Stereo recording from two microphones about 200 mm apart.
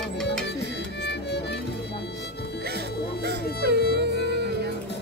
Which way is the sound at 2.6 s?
55° right (ahead or behind).